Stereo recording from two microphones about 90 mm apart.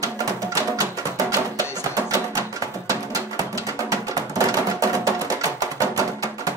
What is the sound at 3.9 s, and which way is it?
Music, 40° right (ahead or behind).